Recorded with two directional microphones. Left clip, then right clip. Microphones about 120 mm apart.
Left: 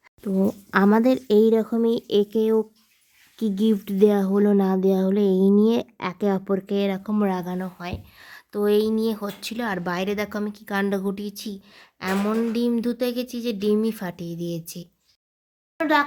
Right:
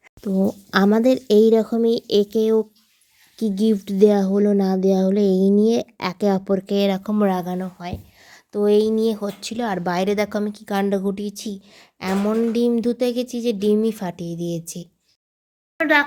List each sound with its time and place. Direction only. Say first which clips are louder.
0.2 s speech: right 2 dB; 45° right (ahead or behind)
0.9 s speech: right 3 dB; 25° right (ahead or behind)
4.3 s speech: right 2 dB; 15° right (ahead or behind)
4.5 s speech: right 2 dB; 25° right (ahead or behind); by 7.1 s 40° right (ahead or behind)
7.2 s speech: right 4 dB; 30° right (ahead or behind)
7.8 s speech: right 1 dB; 10° right (ahead or behind); by 10.8 s 30° right (ahead or behind)
10.8 s speech: right 4 dB; 20° right (ahead or behind)
15.8 s a child's voice: right 3 dB; 15° left (ahead or behind)